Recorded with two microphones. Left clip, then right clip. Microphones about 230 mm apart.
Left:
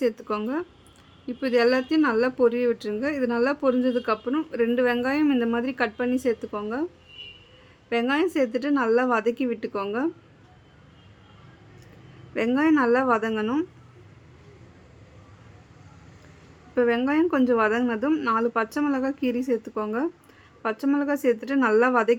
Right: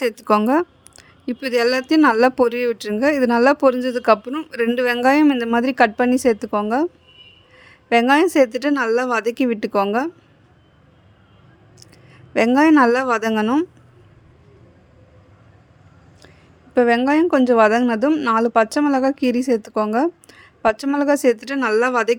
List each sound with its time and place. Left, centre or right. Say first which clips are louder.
0.0 s a woman's voice: right 8 dB; right
7.9 s a woman's voice: right 9 dB; right
12.3 s speech: right 8 dB; right
16.7 s speech: right 7 dB; right